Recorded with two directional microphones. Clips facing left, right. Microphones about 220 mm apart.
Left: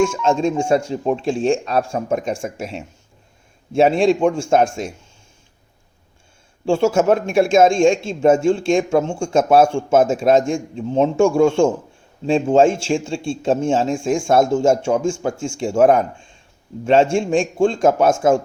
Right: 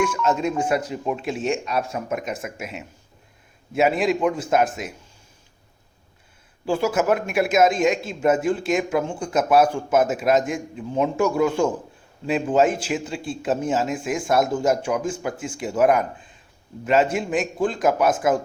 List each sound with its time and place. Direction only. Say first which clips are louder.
0.0 s speech: left 5 dB; 25° left (ahead or behind)
6.7 s speech: left 5 dB; 25° left (ahead or behind)